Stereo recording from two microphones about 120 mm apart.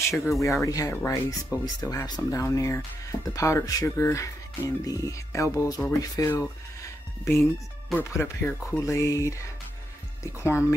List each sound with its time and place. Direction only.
0.1 s speech: centre (ahead or behind)
0.4 s speech: 25° left (ahead or behind)